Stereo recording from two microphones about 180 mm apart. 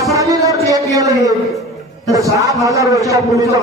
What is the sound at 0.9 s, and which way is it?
A man's voice, 20° right (ahead or behind).